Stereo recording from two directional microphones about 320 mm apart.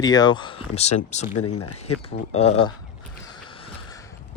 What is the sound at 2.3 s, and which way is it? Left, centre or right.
Speech, centre.